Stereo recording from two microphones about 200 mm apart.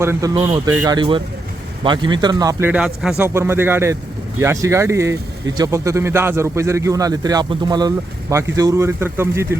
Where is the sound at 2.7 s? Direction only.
5° right (ahead or behind).